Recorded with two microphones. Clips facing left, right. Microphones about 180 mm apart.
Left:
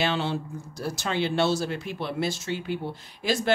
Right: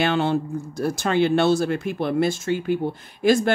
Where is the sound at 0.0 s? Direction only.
50° right (ahead or behind).